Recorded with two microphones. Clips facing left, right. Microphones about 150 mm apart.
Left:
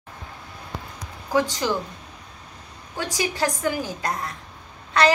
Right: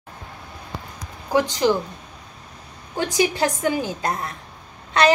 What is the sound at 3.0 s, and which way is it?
A woman's voice, 20° right (ahead or behind).